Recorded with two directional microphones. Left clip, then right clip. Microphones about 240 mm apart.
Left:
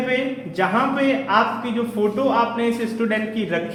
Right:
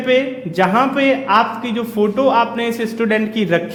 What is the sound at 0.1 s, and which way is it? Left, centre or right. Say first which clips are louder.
A man's voice: right 7 dB; right.